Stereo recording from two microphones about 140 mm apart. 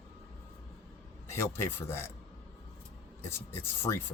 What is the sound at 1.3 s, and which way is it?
Speech, 20° left (ahead or behind).